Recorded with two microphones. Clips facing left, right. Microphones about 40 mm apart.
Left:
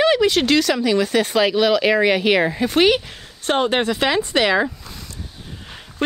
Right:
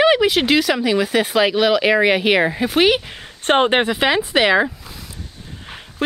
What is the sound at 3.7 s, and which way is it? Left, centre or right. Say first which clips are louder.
Speech: right 2 dB; centre.